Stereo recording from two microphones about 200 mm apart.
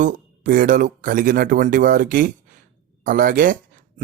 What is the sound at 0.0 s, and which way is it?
Speech, 45° right (ahead or behind).